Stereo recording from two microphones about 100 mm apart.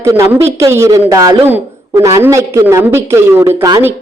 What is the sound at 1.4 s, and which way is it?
A man's voice, 20° right (ahead or behind).